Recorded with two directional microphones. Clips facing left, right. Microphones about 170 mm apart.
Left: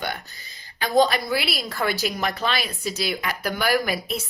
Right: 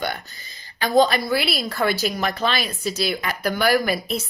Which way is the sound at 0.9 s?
15° left (ahead or behind).